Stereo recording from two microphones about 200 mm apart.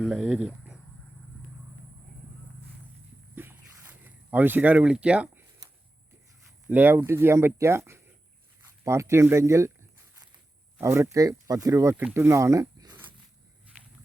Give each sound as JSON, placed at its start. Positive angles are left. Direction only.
{"t": 0.0, "sound": "speech", "side_deg": 0}
{"t": 3.3, "sound": "a sound", "side_deg": -10}
{"t": 6.7, "sound": "speech", "side_deg": -10}
{"t": 10.8, "sound": "speech", "side_deg": -15}